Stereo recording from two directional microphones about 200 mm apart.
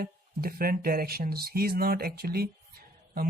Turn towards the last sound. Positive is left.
turn(degrees=-50)  # may be behind; listen again after turning